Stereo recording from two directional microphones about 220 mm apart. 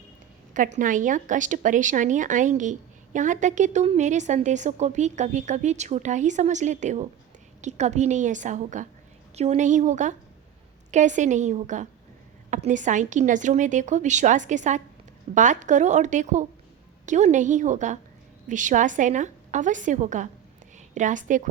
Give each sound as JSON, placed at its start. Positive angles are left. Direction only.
{"t": 0.5, "sound": "a woman's voice", "side_deg": -35}